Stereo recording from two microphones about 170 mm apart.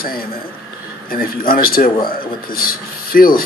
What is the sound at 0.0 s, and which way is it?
A man's voice, 60° left (ahead or behind).